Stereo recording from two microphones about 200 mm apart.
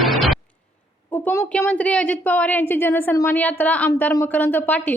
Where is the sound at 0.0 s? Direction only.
Centre (ahead or behind).